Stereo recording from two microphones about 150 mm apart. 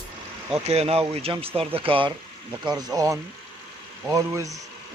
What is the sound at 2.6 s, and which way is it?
Speech, 20° right (ahead or behind).